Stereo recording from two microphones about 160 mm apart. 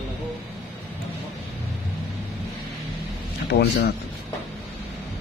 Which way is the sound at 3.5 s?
90° left.